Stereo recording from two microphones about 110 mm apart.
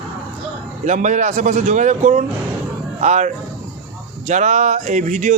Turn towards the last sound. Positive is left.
turn(degrees=-90)